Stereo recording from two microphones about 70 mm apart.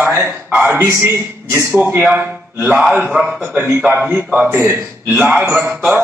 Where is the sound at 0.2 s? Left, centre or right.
Right.